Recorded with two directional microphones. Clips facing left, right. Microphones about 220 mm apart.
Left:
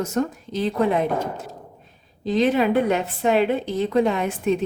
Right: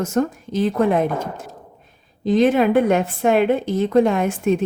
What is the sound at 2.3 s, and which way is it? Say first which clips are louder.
Speech: right 4 dB; 50° right (ahead or behind).